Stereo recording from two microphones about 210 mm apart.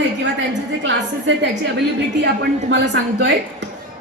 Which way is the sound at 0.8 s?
60° right (ahead or behind).